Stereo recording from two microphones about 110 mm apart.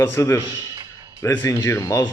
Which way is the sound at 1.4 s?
30° left (ahead or behind).